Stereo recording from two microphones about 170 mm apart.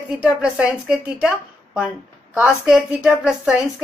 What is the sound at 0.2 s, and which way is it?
A woman's voice, 5° right (ahead or behind).